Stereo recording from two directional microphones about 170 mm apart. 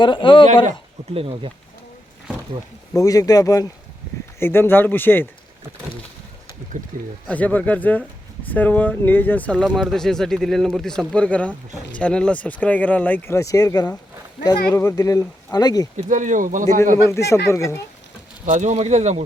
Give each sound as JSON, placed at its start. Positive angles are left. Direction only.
{"t": 0.0, "sound": "speech", "side_deg": 30}
{"t": 1.1, "sound": "speech", "side_deg": -35}
{"t": 2.9, "sound": "speech", "side_deg": 20}
{"t": 7.3, "sound": "speech", "side_deg": 10}
{"t": 16.0, "sound": "speech", "side_deg": -45}
{"t": 17.1, "sound": "speech", "side_deg": 15}
{"t": 18.4, "sound": "speech", "side_deg": -45}